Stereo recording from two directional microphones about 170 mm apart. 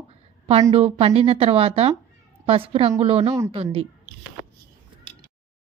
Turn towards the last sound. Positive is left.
turn(degrees=-35)  # may be behind; listen again after turning